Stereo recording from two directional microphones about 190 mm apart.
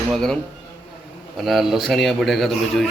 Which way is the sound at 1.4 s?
Centre (ahead or behind).